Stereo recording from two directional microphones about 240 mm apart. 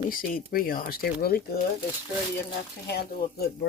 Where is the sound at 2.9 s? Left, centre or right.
Left.